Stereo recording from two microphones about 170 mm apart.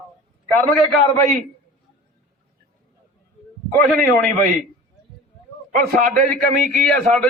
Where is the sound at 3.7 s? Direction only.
55° right (ahead or behind).